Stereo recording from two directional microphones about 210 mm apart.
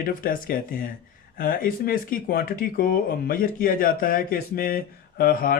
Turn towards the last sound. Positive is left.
turn(degrees=45)  # may be behind; listen again after turning